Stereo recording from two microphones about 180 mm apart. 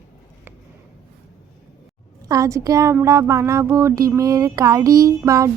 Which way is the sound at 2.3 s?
15° right (ahead or behind).